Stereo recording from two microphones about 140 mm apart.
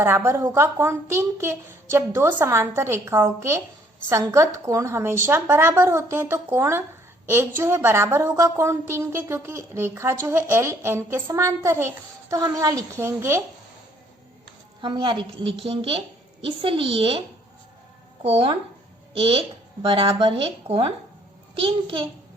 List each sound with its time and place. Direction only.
0.0 s a woman's voice: 15° right (ahead or behind)
14.8 s a woman's voice: 35° right (ahead or behind)